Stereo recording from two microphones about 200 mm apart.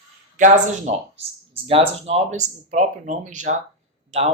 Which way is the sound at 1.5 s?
30° right (ahead or behind).